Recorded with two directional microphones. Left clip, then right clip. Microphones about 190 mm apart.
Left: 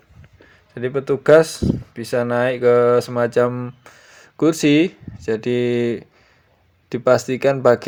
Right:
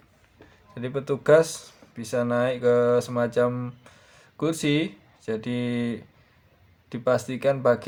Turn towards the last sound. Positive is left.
turn(degrees=35)  # may be behind; listen again after turning